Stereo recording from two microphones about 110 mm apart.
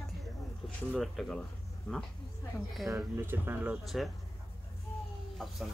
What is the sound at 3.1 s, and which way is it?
Speech, 20° right (ahead or behind).